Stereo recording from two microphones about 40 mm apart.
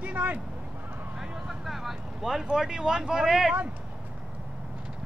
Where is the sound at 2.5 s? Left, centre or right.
Centre.